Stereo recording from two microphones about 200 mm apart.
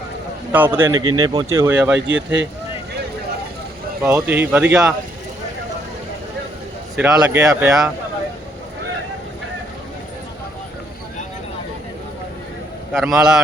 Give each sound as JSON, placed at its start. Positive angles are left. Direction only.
{"t": 0.5, "sound": "speech", "side_deg": -10}
{"t": 2.0, "sound": "speech", "side_deg": -65}
{"t": 4.1, "sound": "speech", "side_deg": -10}
{"t": 6.9, "sound": "speech", "side_deg": -5}
{"t": 12.9, "sound": "speech", "side_deg": 0}